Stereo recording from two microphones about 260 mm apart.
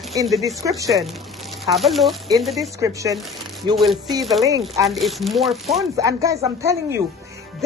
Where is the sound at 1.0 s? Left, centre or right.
Centre.